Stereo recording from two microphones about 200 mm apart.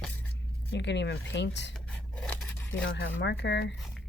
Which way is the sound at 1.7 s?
5° left (ahead or behind).